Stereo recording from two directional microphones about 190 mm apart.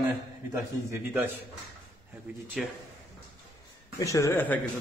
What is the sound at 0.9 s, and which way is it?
Speech, 15° right (ahead or behind).